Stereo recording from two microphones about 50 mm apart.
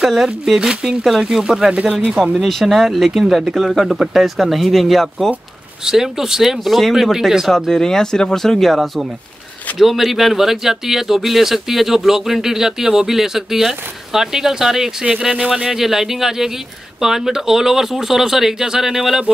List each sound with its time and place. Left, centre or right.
0.0 s speech: centre
2.3 s speech: centre
5.9 s speech: centre
7.4 s speech: centre
15.3 s speech: centre
15.6 s speech: centre